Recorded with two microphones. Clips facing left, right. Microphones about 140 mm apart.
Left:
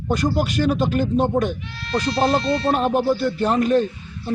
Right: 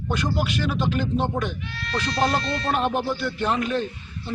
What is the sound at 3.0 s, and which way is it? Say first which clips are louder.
Speech: left 5 dB; 35° left (ahead or behind).